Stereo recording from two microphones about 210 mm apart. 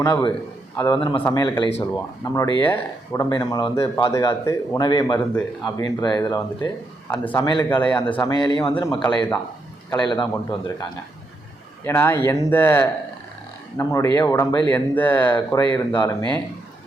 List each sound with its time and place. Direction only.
0.0 s a man's voice: 20° left (ahead or behind)
7.4 s a man's voice: 20° left (ahead or behind)
7.7 s speech: 5° left (ahead or behind)
8.3 s a man's voice: 20° left (ahead or behind)
9.9 s a man's voice: 20° left (ahead or behind)